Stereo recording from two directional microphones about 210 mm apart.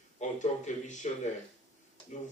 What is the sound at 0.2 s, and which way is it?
Speech, 35° left (ahead or behind).